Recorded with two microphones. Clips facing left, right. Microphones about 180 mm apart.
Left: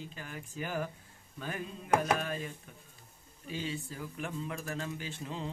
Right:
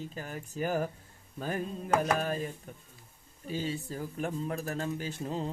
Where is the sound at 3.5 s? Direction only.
40° right (ahead or behind).